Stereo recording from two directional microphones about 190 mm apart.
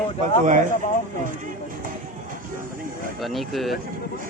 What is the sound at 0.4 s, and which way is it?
Speech, 40° right (ahead or behind).